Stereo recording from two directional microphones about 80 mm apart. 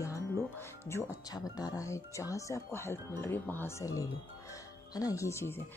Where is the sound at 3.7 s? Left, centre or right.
Left.